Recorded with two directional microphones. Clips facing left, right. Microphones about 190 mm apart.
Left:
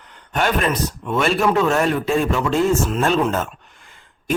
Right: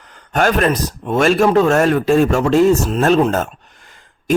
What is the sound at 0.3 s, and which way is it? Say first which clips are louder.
A man's voice: right 5 dB; 45° right (ahead or behind).